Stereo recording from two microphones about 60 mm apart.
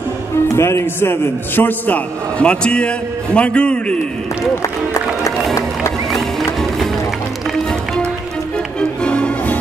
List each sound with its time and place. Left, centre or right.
0.5 s a man's voice: left
2.3 s a man's voice: centre
6.1 s music: centre
9.0 s music: centre